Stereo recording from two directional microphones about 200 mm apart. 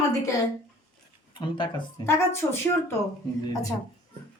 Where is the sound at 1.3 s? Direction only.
25° left (ahead or behind).